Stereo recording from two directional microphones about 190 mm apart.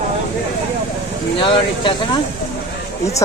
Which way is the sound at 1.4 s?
25° left (ahead or behind).